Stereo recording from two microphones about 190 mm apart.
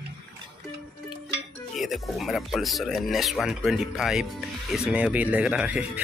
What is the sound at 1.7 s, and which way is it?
Speech, centre (ahead or behind).